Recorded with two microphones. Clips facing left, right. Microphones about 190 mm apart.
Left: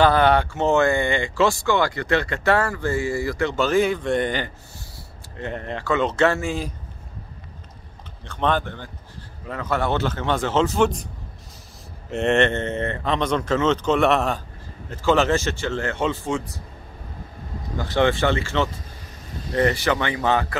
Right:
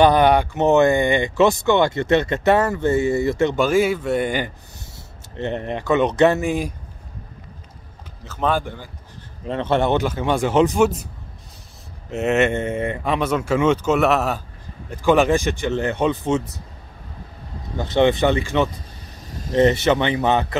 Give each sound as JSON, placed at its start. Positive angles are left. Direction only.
{"t": 0.0, "sound": "speech", "side_deg": -15}
{"t": 5.4, "sound": "speech", "side_deg": -20}
{"t": 8.2, "sound": "speech", "side_deg": -5}
{"t": 9.5, "sound": "speech", "side_deg": -25}
{"t": 12.1, "sound": "speech", "side_deg": -5}
{"t": 14.9, "sound": "speech", "side_deg": -15}
{"t": 17.7, "sound": "speech", "side_deg": -20}